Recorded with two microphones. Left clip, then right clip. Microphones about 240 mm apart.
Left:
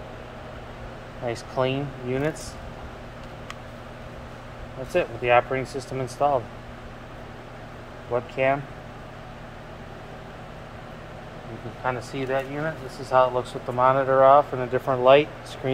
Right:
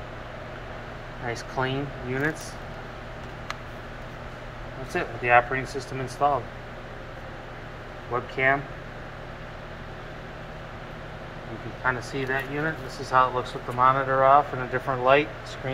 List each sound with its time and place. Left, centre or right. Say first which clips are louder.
1.6 s speech: left 4 dB; left
5.2 s speech: right 2 dB; left
8.1 s speech: left 1 dB; left
11.8 s speech: right 1 dB; left